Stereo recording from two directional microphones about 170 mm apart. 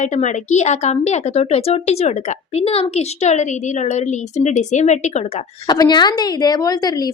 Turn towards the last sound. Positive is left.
turn(degrees=25)  # may be behind; listen again after turning